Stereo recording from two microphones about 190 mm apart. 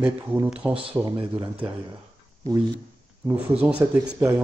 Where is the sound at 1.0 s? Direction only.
25° right (ahead or behind).